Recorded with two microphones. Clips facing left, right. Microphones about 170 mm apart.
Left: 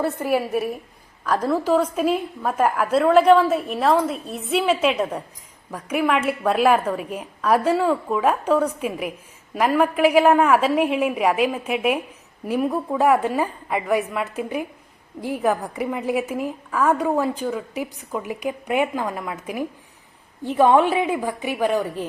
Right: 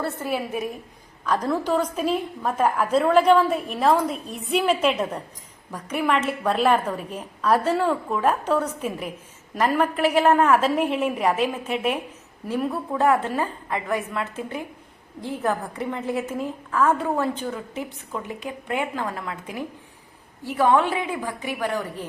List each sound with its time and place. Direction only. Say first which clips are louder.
0.0 s a woman's voice: left 5 dB; 15° left (ahead or behind)
20.7 s a woman's voice: left 4 dB; 15° left (ahead or behind)